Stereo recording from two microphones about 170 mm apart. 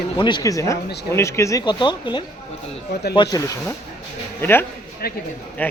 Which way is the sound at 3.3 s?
20° left (ahead or behind).